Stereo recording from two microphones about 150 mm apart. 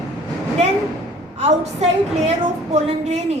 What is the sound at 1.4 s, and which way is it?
A woman's voice, 45° right (ahead or behind).